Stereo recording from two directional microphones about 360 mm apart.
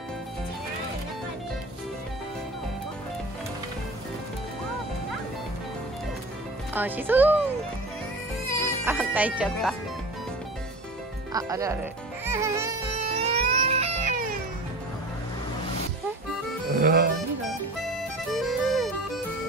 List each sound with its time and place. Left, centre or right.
6.7 s speech: centre
8.8 s speech: centre
11.3 s speech: centre
12.3 s music: centre
16.7 s music: right
18.4 s music: centre